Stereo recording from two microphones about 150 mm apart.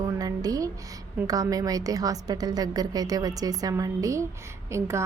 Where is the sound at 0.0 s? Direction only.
25° right (ahead or behind).